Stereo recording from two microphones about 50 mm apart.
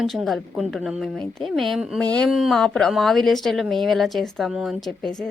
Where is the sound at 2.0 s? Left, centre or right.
Left.